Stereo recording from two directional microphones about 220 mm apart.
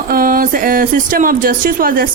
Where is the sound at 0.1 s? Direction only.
40° right (ahead or behind).